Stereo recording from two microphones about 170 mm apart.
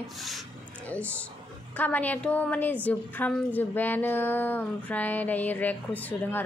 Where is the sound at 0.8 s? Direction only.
10° left (ahead or behind).